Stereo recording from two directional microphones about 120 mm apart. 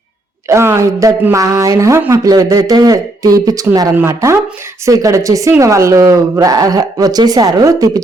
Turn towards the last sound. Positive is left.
turn(degrees=-30)  # may be behind; listen again after turning